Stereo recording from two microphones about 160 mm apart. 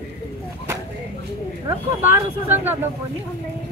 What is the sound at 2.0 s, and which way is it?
Speech, 15° right (ahead or behind).